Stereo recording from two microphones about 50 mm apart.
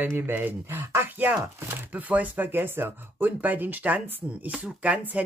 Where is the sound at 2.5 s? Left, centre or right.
Right.